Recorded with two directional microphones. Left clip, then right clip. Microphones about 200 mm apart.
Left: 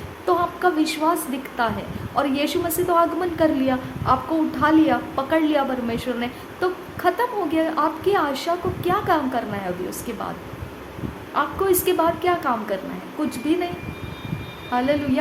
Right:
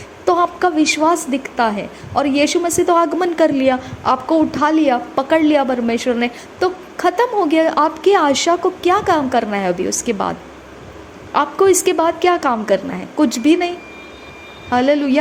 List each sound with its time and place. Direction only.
0.3 s a woman's voice: 30° right (ahead or behind)
11.3 s a woman's voice: 35° right (ahead or behind)
14.7 s a woman's voice: 35° right (ahead or behind)